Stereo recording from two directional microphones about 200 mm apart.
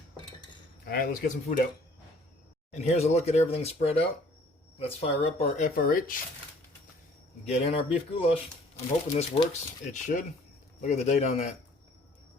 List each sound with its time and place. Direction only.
0.9 s a man's voice: 45° left (ahead or behind)
2.7 s speech: 35° left (ahead or behind)
7.4 s speech: 30° left (ahead or behind)